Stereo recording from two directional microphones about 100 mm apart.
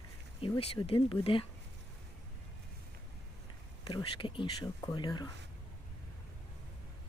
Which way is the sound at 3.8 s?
55° left (ahead or behind).